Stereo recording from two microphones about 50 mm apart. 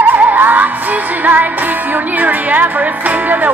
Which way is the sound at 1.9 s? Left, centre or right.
Right.